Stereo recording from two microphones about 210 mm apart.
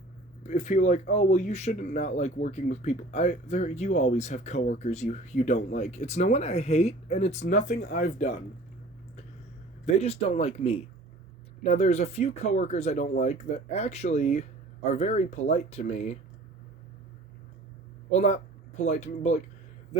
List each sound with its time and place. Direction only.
0.4 s speech: 35° left (ahead or behind)
9.8 s speech: 30° left (ahead or behind)
18.1 s speech: 35° left (ahead or behind)